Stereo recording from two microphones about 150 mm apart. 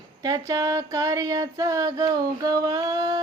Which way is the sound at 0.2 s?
25° right (ahead or behind).